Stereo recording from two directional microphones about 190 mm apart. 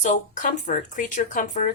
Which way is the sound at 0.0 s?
40° left (ahead or behind).